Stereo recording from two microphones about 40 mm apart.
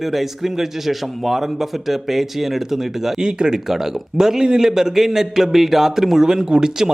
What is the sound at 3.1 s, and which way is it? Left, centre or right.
A man's voice, centre.